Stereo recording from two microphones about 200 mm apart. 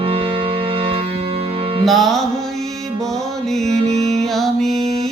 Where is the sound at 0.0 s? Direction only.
30° right (ahead or behind).